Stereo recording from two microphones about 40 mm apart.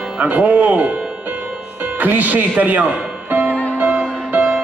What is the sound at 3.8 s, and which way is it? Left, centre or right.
Music, right.